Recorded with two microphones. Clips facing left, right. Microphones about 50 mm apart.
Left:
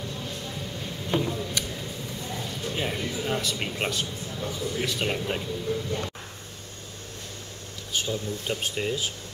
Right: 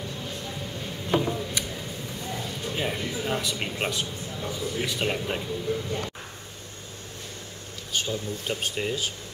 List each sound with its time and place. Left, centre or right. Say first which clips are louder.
1.0 s a sound: right 2 dB; centre
4.5 s a man's voice: even; centre
4.8 s speech: even; centre
8.0 s speech: left 1 dB; centre